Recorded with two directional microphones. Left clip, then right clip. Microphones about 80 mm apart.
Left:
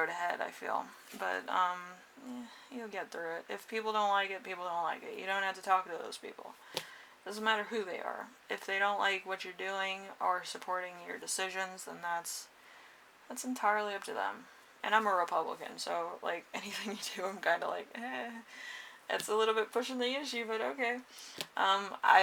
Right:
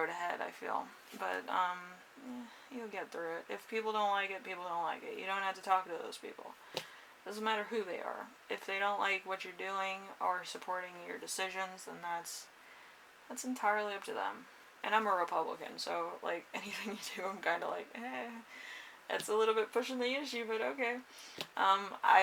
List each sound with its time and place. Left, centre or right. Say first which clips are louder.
0.0 s speech: left 3 dB; left
6.7 s a sound: left 2 dB; centre
7.3 s speech: left 3 dB; left
19.3 s speech: left 1 dB; left